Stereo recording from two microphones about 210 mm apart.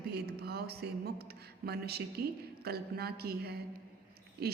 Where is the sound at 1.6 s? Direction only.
50° right (ahead or behind).